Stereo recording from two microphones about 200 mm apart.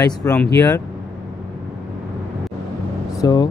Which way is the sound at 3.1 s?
20° left (ahead or behind).